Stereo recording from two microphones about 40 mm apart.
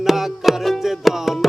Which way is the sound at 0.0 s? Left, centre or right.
Centre.